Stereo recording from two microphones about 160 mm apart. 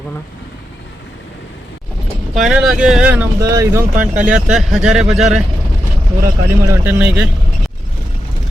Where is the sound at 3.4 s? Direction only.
20° right (ahead or behind).